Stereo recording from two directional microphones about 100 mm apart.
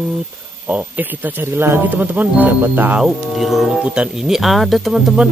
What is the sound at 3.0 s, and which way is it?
Speech, centre (ahead or behind).